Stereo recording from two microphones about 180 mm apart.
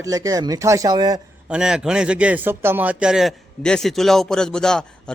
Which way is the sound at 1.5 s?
5° right (ahead or behind).